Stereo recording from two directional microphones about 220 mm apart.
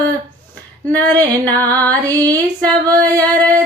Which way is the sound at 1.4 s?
15° right (ahead or behind).